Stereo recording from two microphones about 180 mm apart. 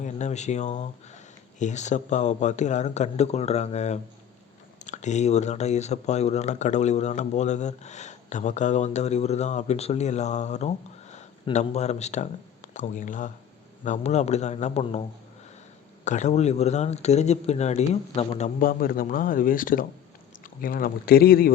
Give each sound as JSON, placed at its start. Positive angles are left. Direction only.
{"t": 0.0, "sound": "speech", "side_deg": 40}
{"t": 16.0, "sound": "speech", "side_deg": 40}